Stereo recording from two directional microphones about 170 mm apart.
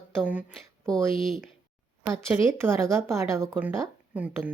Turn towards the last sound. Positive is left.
turn(degrees=-10)  # may be behind; listen again after turning